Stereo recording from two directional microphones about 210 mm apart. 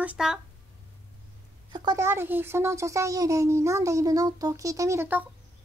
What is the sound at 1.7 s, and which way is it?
A child's voice, 15° right (ahead or behind).